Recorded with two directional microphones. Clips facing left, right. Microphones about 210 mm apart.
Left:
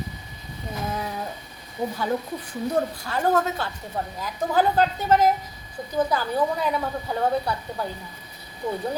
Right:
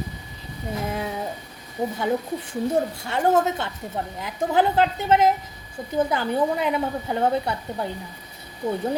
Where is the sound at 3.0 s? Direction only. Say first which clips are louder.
Right 4 dB; 25° right (ahead or behind).